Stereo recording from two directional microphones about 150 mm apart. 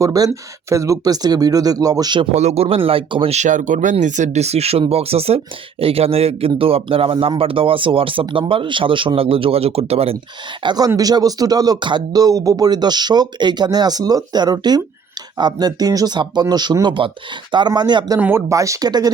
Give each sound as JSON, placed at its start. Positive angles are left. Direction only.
{"t": 0.0, "sound": "speech", "side_deg": -25}
{"t": 2.3, "sound": "speech", "side_deg": -50}
{"t": 3.3, "sound": "speech", "side_deg": -55}
{"t": 10.6, "sound": "speech", "side_deg": -30}
{"t": 18.2, "sound": "speech", "side_deg": -15}